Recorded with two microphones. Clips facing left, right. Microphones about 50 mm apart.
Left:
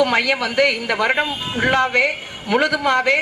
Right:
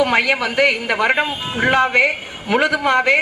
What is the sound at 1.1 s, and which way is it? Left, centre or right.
A man's voice, centre.